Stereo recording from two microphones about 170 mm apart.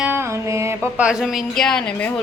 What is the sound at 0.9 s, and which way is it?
Speech, 5° right (ahead or behind).